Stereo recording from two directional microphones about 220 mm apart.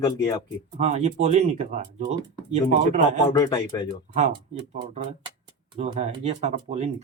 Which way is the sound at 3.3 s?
15° left (ahead or behind).